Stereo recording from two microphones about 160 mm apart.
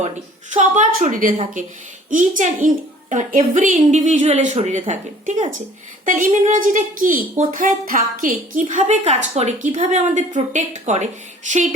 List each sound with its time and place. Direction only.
0.5 s a woman's voice: 50° right (ahead or behind)
8.7 s a woman's voice: 45° right (ahead or behind)